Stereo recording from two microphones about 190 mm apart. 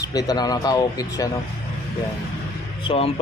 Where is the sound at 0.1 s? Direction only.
20° left (ahead or behind).